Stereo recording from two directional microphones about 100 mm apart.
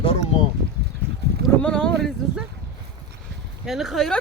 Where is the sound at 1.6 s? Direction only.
10° left (ahead or behind).